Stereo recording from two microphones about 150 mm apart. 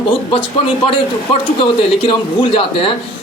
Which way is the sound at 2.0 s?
35° left (ahead or behind).